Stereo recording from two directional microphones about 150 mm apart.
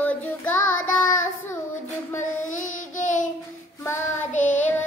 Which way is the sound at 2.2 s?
55° left (ahead or behind).